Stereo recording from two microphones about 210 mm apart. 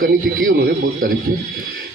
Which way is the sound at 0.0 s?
45° right (ahead or behind).